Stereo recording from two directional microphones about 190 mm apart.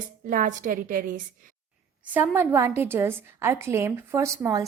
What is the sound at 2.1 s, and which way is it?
A woman's voice, 10° right (ahead or behind).